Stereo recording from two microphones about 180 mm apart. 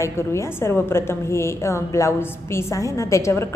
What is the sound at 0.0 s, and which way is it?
A woman's voice, 15° left (ahead or behind).